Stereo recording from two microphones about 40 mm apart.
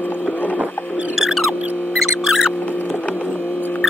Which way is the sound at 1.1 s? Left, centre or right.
Centre.